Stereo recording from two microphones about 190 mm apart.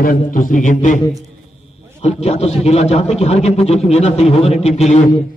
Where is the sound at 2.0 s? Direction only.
35° left (ahead or behind).